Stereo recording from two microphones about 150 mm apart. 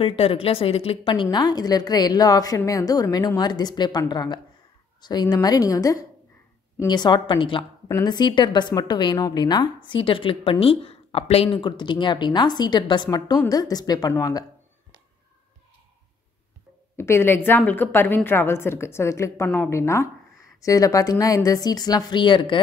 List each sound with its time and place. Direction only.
0.0 s a woman's voice: 40° left (ahead or behind)
16.9 s a woman's voice: 15° left (ahead or behind)